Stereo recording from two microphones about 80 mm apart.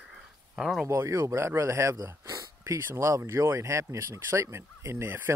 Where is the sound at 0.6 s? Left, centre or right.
Centre.